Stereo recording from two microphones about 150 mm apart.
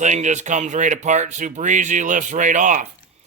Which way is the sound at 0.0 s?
50° right (ahead or behind).